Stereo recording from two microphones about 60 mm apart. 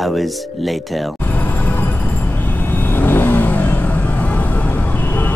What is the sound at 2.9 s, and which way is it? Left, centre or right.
Vehicle, left.